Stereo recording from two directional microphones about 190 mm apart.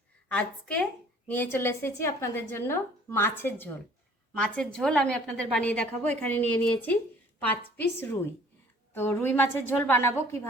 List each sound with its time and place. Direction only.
0.3 s a woman's voice: 5° left (ahead or behind)